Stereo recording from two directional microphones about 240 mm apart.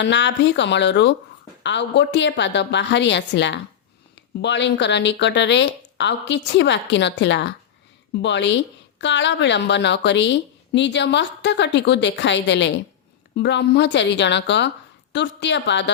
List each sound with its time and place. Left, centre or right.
0.0 s a woman's voice: left